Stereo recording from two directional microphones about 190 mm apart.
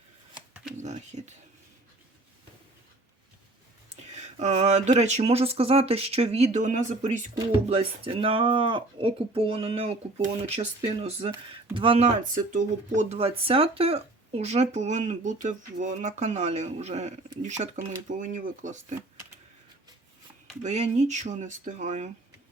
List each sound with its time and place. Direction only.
0.8 s a sound: 35° right (ahead or behind)
4.2 s speech: 35° right (ahead or behind)
20.6 s speech: 35° right (ahead or behind)